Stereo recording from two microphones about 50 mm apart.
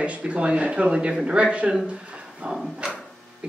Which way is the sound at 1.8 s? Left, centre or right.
Right.